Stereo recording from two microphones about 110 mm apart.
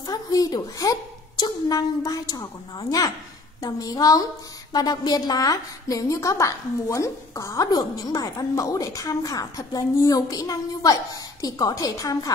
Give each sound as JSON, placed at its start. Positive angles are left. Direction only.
{"t": 0.0, "sound": "a woman's voice", "side_deg": 35}
{"t": 3.6, "sound": "a woman's voice", "side_deg": 30}